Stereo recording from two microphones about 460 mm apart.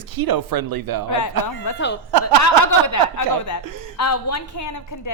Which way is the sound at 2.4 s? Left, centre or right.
Left.